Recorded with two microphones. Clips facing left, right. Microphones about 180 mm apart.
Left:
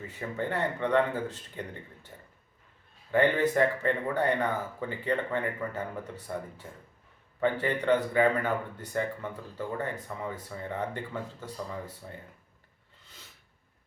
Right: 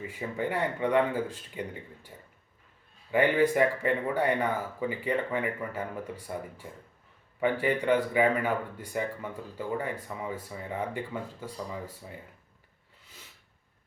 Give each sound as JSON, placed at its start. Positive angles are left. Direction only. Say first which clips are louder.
{"t": 0.1, "sound": "speech", "louder": "even", "side_deg": -10}
{"t": 3.1, "sound": "speech", "louder": "right 1 dB", "side_deg": -10}